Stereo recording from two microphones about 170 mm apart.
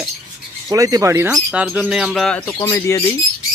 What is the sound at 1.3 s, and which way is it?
Speech, 5° right (ahead or behind).